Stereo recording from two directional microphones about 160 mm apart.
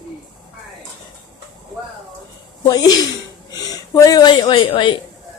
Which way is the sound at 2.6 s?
25° left (ahead or behind).